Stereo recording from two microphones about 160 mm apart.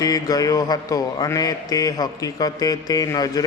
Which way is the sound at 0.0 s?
25° left (ahead or behind).